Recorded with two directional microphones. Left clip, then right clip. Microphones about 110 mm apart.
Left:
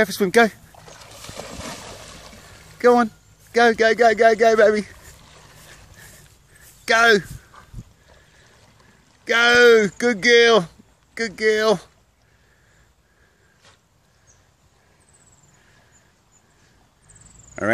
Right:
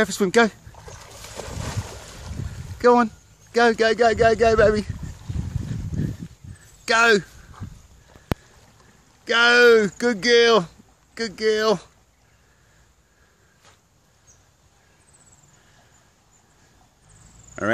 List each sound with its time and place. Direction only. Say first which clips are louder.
0.0 s speech: left 2 dB; 5° left (ahead or behind)
0.7 s boat: even; centre (ahead or behind)
2.8 s speech: left 1 dB; 15° left (ahead or behind)
6.8 s speech: left 2 dB; 15° left (ahead or behind)
9.2 s speech: left 1 dB; 20° left (ahead or behind)